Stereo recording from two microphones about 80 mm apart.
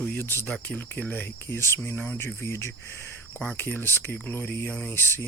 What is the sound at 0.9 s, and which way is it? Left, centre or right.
Speech, left.